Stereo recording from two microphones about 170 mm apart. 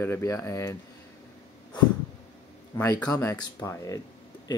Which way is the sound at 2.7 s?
20° left (ahead or behind).